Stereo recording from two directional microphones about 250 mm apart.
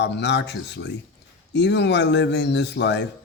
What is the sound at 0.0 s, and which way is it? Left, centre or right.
Speech, left.